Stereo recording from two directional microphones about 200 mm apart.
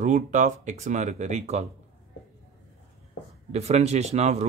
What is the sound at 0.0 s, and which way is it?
Speech, 40° right (ahead or behind).